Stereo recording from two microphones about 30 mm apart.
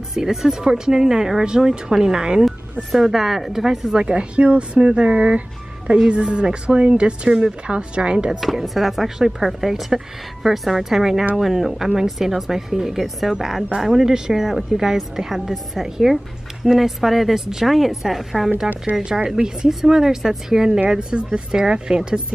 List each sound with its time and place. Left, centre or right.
0.1 s a woman's voice: centre
2.4 s a woman's voice: centre
4.0 s speech: right
8.6 s a woman's voice: centre
13.7 s a woman's voice: centre
19.0 s a woman's voice: right
20.9 s speech: right